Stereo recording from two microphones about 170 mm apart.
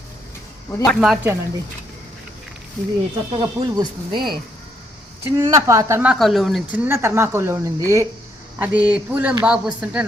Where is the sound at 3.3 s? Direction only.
25° right (ahead or behind).